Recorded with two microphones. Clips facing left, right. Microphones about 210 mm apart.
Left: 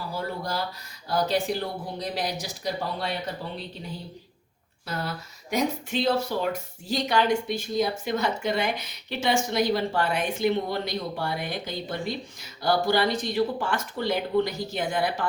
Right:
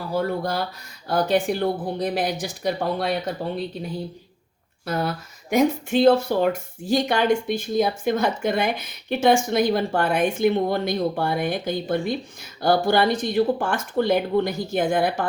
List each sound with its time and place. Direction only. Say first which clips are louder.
0.1 s speech: right 9 dB; 55° right (ahead or behind)
4.9 s speech: right 7 dB; 50° right (ahead or behind)